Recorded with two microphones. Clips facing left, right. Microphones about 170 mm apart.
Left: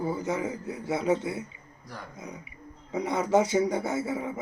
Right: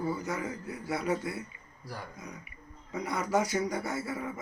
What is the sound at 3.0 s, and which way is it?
A man's voice, 25° left (ahead or behind).